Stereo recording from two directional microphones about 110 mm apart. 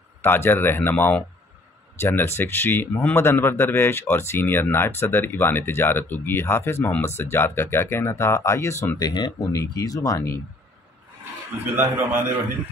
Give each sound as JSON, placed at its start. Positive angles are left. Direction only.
{"t": 0.2, "sound": "speech", "side_deg": 20}
{"t": 9.0, "sound": "speech", "side_deg": 40}
{"t": 11.7, "sound": "a man's voice", "side_deg": -20}